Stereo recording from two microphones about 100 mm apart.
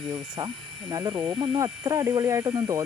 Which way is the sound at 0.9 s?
45° right (ahead or behind).